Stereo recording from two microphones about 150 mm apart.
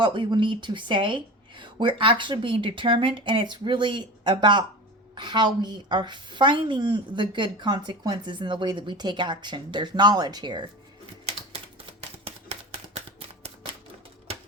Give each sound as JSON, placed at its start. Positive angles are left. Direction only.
{"t": 0.0, "sound": "a woman's voice", "side_deg": -30}
{"t": 11.9, "sound": "typewriter", "side_deg": -45}